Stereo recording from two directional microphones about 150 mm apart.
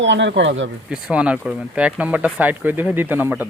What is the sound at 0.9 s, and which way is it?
Speech, 5° right (ahead or behind).